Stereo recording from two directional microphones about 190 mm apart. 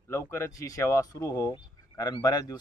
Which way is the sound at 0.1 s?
15° left (ahead or behind).